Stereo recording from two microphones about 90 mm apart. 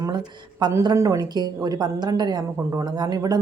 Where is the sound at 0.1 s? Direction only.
55° right (ahead or behind).